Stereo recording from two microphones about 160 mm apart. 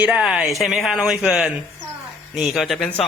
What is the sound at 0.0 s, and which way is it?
A man's voice, 5° right (ahead or behind).